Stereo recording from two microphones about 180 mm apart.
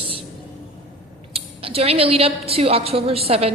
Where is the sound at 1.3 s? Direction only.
35° right (ahead or behind).